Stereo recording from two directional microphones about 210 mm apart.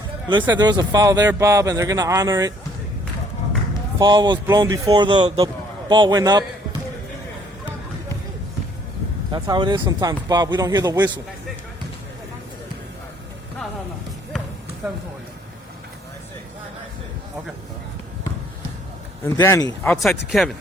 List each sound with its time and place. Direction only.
0.3 s speech: 20° right (ahead or behind)
3.9 s speech: 20° right (ahead or behind)
9.3 s speech: 20° right (ahead or behind)
19.2 s speech: 10° left (ahead or behind)
19.9 s speech: centre (ahead or behind)